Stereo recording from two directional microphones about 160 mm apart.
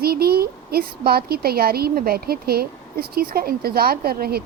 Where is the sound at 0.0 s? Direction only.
75° right (ahead or behind).